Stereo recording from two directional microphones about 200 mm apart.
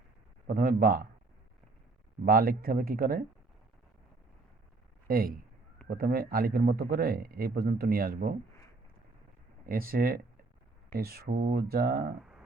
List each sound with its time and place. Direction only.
0.4 s speech: 45° right (ahead or behind)
2.2 s speech: 45° right (ahead or behind)
5.0 s speech: 45° right (ahead or behind)
9.6 s speech: 45° right (ahead or behind)